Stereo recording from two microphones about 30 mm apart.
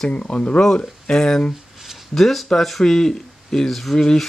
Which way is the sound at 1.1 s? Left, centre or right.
Left.